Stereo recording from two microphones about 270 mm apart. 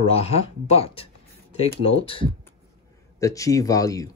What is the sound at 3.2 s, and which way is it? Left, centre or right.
Speech, centre.